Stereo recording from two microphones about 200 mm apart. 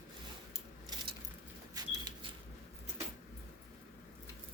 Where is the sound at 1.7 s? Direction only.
20° right (ahead or behind).